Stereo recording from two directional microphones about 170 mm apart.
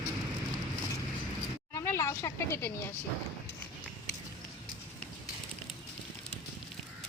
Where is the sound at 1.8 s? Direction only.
15° left (ahead or behind).